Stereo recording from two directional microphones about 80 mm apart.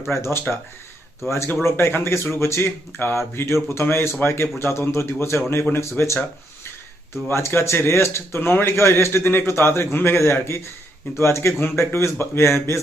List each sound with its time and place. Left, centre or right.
0.1 s speech: left
7.3 s speech: left